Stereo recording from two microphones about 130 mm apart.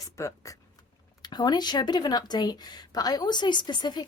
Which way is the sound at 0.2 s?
25° left (ahead or behind).